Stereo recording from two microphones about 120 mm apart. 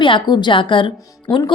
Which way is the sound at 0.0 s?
40° left (ahead or behind).